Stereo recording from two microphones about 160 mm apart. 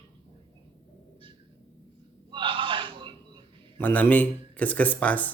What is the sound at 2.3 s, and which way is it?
Gasp, 30° right (ahead or behind).